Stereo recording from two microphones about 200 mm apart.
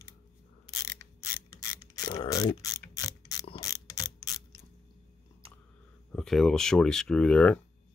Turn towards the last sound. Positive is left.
turn(degrees=5)  # may be behind; listen again after turning